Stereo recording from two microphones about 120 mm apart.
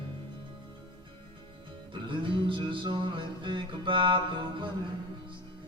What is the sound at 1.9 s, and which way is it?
Music, 45° right (ahead or behind).